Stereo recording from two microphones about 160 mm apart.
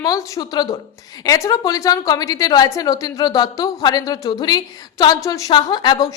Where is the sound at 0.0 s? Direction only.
20° left (ahead or behind).